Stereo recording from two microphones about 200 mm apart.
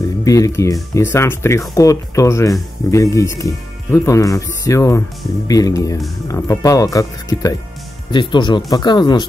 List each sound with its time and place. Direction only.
0.2 s speech: 15° left (ahead or behind)